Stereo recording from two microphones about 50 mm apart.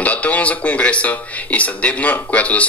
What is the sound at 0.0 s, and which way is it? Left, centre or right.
Speech, left.